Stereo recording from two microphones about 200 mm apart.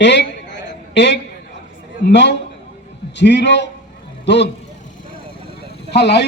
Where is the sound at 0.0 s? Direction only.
60° left (ahead or behind).